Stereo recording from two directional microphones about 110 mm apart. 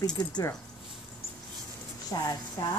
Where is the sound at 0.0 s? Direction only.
40° left (ahead or behind).